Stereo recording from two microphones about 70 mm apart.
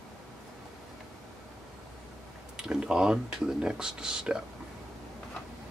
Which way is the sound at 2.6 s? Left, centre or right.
Centre.